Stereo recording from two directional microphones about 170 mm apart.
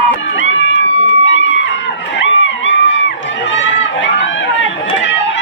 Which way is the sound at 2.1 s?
90° left.